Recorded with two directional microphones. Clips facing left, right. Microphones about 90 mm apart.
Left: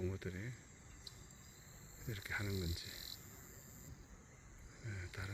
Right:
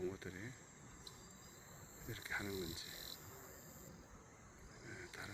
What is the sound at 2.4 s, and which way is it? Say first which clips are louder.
Cricket: left 1 dB; 35° right (ahead or behind).